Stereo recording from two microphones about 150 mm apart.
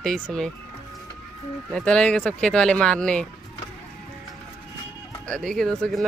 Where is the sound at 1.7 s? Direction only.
5° left (ahead or behind).